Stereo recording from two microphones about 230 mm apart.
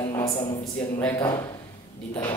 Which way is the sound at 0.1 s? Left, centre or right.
Centre.